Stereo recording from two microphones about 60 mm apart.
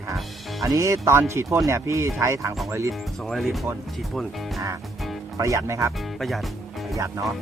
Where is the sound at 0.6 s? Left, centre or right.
Right.